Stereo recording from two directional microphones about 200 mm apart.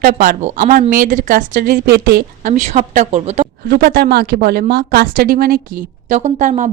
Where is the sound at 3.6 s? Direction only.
50° right (ahead or behind).